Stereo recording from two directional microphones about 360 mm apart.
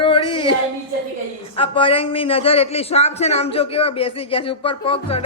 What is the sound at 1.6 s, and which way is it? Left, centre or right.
A man's voice, centre.